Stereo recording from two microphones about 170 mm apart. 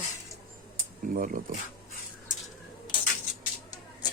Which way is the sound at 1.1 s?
55° right (ahead or behind).